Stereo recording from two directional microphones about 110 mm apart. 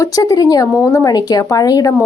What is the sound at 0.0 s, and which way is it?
A woman's voice, 30° left (ahead or behind).